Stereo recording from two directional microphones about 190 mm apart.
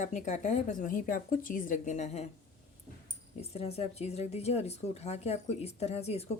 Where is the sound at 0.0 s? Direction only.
40° left (ahead or behind).